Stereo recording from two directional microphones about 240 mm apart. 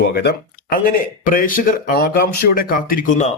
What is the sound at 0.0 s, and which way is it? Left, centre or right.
Speech, left.